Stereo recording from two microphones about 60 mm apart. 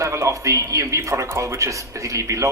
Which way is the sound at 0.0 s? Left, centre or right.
Right.